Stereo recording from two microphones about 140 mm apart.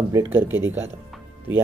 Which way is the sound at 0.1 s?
20° right (ahead or behind).